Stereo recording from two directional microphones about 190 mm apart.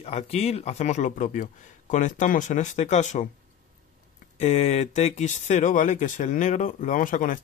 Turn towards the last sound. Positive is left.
turn(degrees=45)  # may be behind; listen again after turning